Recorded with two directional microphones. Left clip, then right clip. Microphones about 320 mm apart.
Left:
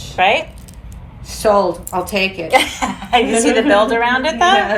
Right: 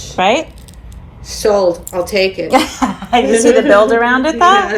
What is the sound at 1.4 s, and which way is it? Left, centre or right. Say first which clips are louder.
Speech: right 2 dB; centre.